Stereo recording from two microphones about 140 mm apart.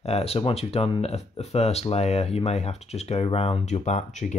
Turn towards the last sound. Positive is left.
turn(degrees=55)  # may be behind; listen again after turning